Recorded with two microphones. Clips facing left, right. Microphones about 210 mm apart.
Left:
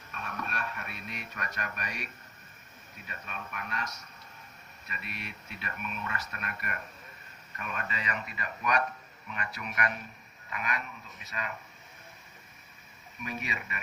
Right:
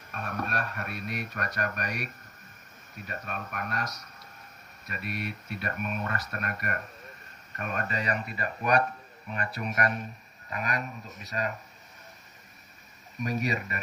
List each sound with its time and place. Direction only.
0.1 s speech: 45° right (ahead or behind)
13.1 s speech: 40° right (ahead or behind)